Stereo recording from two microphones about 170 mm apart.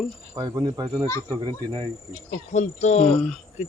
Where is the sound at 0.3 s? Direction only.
25° right (ahead or behind).